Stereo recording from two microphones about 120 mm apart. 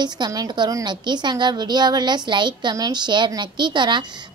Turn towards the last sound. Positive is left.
turn(degrees=-40)  # may be behind; listen again after turning